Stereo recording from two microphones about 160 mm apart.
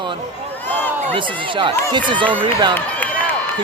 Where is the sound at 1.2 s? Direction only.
30° right (ahead or behind).